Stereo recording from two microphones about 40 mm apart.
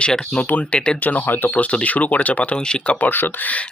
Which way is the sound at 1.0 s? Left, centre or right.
Left.